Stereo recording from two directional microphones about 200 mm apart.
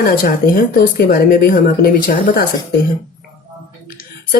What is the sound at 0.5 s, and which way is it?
Speech, 50° left (ahead or behind).